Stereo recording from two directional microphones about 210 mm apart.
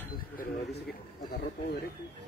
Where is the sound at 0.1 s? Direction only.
45° left (ahead or behind).